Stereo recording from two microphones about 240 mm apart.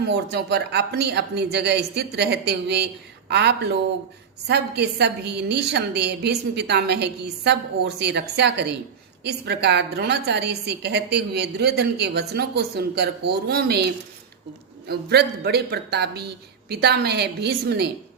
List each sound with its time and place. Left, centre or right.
0.0 s a woman's voice: right